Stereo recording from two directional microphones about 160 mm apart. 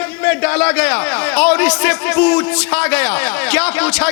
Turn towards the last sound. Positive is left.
turn(degrees=5)  # may be behind; listen again after turning